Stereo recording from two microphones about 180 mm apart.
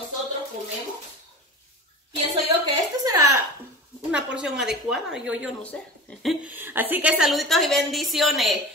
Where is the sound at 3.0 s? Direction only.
15° right (ahead or behind).